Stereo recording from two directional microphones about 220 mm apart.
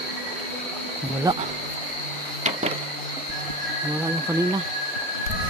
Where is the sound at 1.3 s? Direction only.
20° right (ahead or behind).